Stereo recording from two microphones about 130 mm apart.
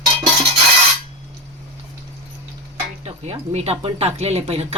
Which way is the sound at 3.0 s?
55° right (ahead or behind).